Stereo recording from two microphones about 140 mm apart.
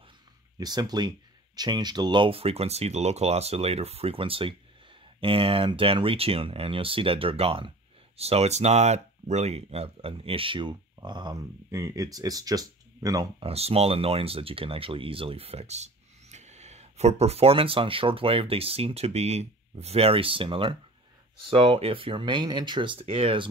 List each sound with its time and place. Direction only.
0.6 s speech: 30° right (ahead or behind)
13.4 s speech: 45° right (ahead or behind)